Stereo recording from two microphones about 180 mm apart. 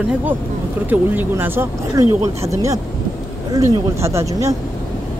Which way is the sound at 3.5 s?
15° right (ahead or behind).